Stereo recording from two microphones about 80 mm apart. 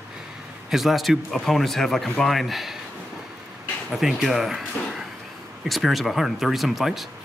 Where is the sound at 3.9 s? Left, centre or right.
Centre.